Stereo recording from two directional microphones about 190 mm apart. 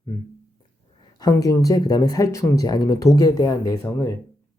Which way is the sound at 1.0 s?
20° left (ahead or behind).